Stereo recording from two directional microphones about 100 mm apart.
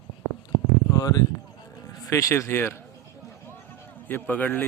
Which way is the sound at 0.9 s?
40° left (ahead or behind).